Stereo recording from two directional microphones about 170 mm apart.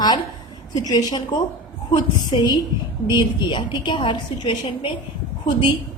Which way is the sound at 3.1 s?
25° left (ahead or behind).